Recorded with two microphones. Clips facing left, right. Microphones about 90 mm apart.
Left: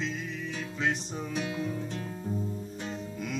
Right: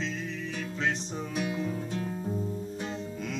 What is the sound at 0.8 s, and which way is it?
Music, centre (ahead or behind).